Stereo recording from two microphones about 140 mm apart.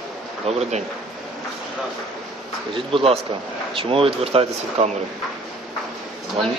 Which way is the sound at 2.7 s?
40° right (ahead or behind).